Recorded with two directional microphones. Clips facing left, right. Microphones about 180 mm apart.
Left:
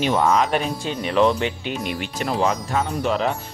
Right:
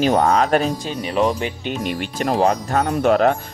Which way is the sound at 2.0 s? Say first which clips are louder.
Right 4 dB; 45° right (ahead or behind).